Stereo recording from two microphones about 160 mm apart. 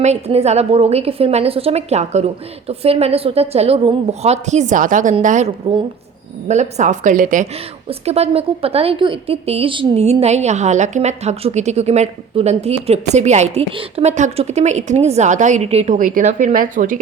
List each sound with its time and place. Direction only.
0.0 s a woman's voice: 40° right (ahead or behind)
6.5 s a woman's voice: 45° right (ahead or behind)
7.9 s a woman's voice: 40° right (ahead or behind); by 17.0 s 60° right (ahead or behind)